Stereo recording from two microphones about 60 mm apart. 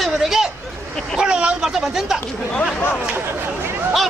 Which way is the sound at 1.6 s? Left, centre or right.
Centre.